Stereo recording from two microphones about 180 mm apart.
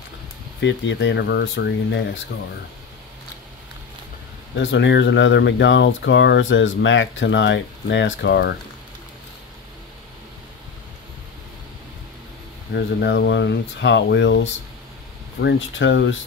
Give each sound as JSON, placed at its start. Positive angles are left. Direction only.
{"t": 0.6, "sound": "speech", "side_deg": 85}
{"t": 4.6, "sound": "speech", "side_deg": 90}
{"t": 12.7, "sound": "speech", "side_deg": 70}